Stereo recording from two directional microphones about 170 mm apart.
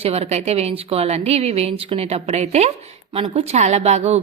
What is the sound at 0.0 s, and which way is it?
Speech, 35° right (ahead or behind).